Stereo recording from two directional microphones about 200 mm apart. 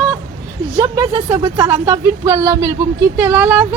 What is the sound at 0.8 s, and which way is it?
A woman's voice, 15° right (ahead or behind).